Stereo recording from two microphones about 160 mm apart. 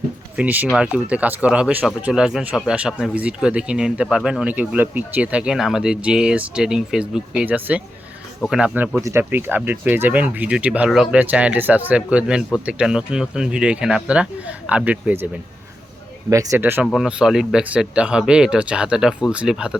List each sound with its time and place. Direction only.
0.3 s speech: 10° right (ahead or behind)
16.8 s speech: centre (ahead or behind)